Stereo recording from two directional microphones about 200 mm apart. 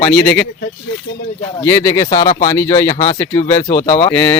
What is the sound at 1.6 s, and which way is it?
Speech, 15° left (ahead or behind).